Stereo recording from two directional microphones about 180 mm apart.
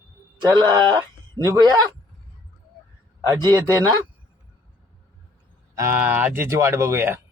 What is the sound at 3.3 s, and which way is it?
Speech, 20° right (ahead or behind).